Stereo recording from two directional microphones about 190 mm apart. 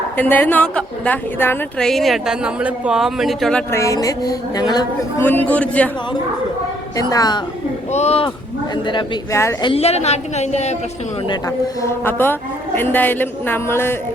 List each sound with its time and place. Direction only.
0.2 s a woman's voice: 10° left (ahead or behind)
3.7 s a woman's voice: 15° left (ahead or behind)
5.5 s a man's voice: 5° left (ahead or behind)
6.9 s a woman's voice: 20° left (ahead or behind)
7.9 s a woman's voice: 35° left (ahead or behind)
9.3 s a man's voice: 15° left (ahead or behind)
9.6 s a woman's voice: 35° left (ahead or behind)
11.3 s a man's voice: 15° left (ahead or behind)